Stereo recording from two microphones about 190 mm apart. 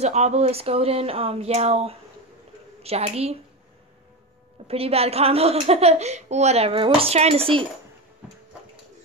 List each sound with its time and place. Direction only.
0.0 s a woman's voice: 35° right (ahead or behind)
4.6 s a woman's voice: 30° right (ahead or behind)